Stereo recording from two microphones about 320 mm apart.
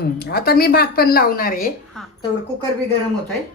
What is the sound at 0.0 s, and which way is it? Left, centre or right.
Speech, left.